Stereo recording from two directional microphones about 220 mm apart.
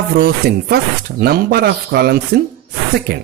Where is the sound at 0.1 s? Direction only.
45° right (ahead or behind).